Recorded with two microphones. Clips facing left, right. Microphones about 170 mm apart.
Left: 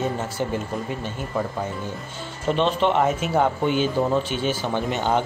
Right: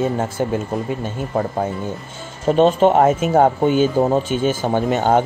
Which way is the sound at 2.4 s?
45° right (ahead or behind).